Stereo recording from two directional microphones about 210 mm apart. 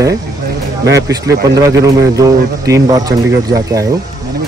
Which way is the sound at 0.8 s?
15° right (ahead or behind).